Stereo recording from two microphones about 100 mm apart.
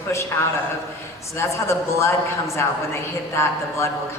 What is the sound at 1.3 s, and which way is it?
Speech, 30° left (ahead or behind).